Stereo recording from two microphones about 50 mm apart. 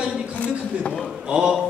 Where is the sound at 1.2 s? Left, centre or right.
Centre.